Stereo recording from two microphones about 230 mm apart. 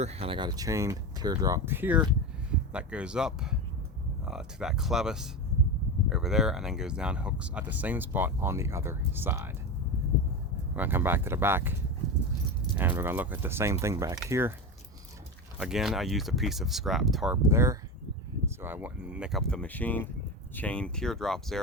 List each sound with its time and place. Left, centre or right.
0.0 s speech: right; by 9.5 s centre
10.8 s speech: centre
12.7 s speech: centre
15.5 s speech: centre